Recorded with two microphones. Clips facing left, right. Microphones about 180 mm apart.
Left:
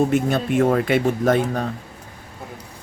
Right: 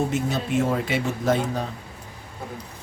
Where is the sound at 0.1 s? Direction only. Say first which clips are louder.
Left 5 dB; 55° left (ahead or behind).